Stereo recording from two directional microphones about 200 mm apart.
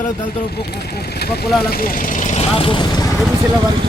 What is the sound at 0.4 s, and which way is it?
Speech, 50° left (ahead or behind).